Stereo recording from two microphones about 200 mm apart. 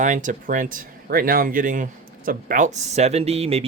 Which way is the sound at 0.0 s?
40° right (ahead or behind).